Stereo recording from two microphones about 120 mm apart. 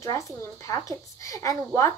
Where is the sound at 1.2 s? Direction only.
25° left (ahead or behind).